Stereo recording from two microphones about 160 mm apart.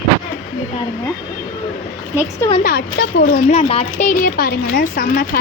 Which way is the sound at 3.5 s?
45° left (ahead or behind).